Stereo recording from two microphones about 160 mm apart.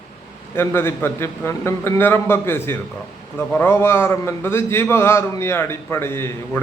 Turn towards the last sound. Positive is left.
turn(degrees=15)  # may be behind; listen again after turning